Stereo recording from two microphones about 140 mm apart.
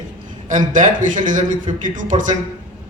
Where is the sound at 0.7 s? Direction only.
65° right (ahead or behind).